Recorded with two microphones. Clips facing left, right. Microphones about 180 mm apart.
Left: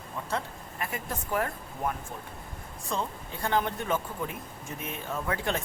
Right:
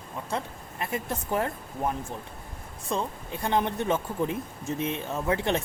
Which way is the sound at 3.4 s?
20° right (ahead or behind).